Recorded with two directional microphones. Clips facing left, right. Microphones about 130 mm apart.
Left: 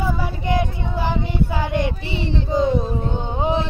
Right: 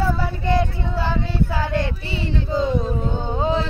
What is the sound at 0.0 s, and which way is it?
Child singing, 15° left (ahead or behind).